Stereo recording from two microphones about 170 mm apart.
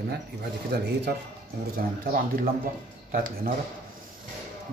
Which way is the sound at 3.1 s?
55° right (ahead or behind).